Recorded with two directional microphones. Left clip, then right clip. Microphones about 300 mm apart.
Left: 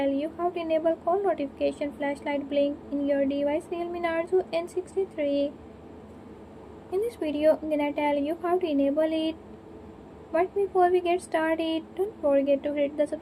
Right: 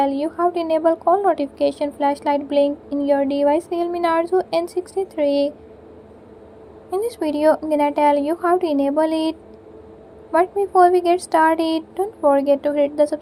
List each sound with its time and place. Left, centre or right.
0.0 s a woman's voice: right
6.9 s a woman's voice: right
10.3 s a woman's voice: right